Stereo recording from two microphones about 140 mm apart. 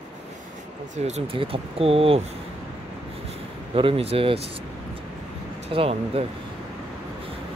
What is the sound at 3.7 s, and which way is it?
Speech, 40° right (ahead or behind).